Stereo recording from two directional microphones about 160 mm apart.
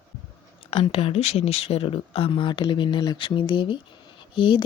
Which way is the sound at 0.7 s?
35° left (ahead or behind).